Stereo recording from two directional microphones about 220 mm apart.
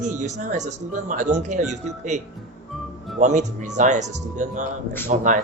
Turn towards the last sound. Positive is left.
turn(degrees=-35)  # may be behind; listen again after turning